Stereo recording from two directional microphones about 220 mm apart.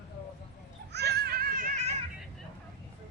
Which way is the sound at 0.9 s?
45° right (ahead or behind).